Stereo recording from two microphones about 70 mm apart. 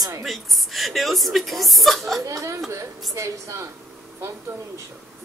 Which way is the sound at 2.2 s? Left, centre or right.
Right.